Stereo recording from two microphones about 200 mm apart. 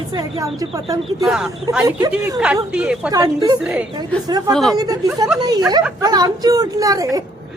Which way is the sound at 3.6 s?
5° right (ahead or behind).